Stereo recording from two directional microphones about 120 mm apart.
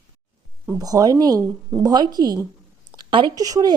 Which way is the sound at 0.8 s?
30° right (ahead or behind).